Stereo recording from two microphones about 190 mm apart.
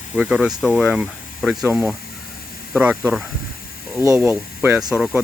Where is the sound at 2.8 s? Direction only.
5° right (ahead or behind).